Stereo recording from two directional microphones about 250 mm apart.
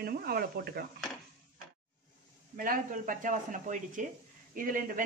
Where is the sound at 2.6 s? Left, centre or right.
Right.